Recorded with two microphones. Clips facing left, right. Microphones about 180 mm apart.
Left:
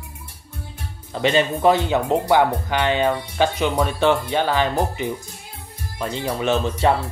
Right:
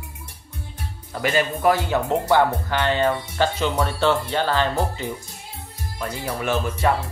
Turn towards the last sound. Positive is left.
turn(degrees=20)  # may be behind; listen again after turning